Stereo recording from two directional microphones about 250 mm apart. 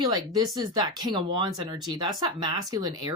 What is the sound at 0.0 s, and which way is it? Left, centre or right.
Speech, centre.